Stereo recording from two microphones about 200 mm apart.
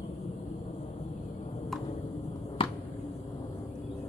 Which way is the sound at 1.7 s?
Centre (ahead or behind).